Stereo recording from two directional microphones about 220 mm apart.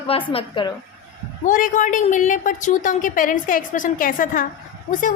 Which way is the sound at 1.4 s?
35° left (ahead or behind).